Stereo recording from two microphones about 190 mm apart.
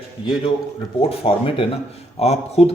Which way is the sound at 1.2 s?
30° left (ahead or behind).